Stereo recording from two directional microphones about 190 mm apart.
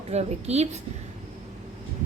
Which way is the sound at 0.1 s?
35° right (ahead or behind).